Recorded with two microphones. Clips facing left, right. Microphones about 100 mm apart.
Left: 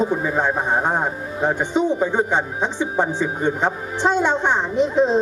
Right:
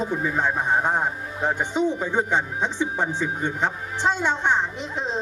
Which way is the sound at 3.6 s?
45° left (ahead or behind).